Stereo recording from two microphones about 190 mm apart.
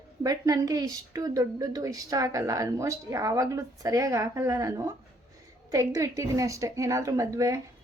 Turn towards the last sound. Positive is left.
turn(degrees=-15)  # may be behind; listen again after turning